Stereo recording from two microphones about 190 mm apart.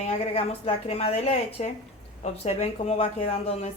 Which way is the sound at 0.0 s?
30° left (ahead or behind).